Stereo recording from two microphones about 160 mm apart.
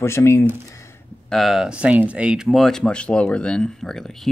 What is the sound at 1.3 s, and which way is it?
Speech, centre (ahead or behind).